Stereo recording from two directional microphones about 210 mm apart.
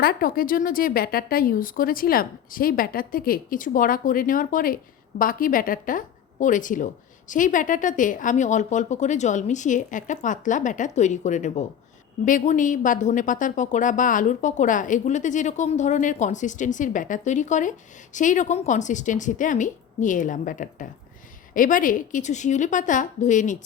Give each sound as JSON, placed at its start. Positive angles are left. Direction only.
{"t": 0.0, "sound": "speech", "side_deg": 45}